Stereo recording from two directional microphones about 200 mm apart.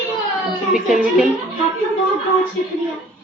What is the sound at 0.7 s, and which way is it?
Speech, 5° right (ahead or behind).